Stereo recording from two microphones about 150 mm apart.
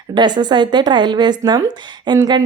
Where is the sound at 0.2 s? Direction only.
30° right (ahead or behind).